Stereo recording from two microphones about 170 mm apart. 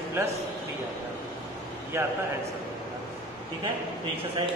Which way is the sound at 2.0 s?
15° right (ahead or behind).